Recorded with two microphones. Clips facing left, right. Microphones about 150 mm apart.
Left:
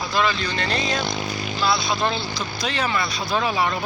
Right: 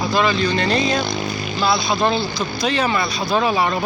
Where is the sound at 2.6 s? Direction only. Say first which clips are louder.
Right 6 dB; 15° right (ahead or behind).